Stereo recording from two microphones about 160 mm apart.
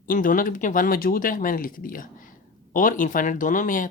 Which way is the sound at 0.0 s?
60° left (ahead or behind).